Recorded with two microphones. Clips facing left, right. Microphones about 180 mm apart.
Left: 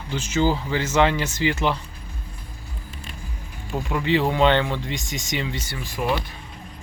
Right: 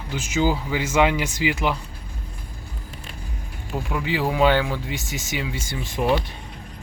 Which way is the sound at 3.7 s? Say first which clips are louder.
Left 3 dB; 5° right (ahead or behind).